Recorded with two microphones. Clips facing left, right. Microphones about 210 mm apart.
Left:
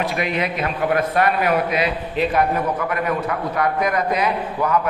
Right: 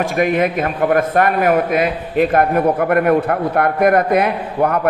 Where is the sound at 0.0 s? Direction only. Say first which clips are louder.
Right 7 dB; 50° right (ahead or behind).